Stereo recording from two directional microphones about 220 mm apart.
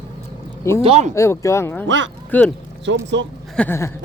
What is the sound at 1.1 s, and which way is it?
Speech, 15° left (ahead or behind).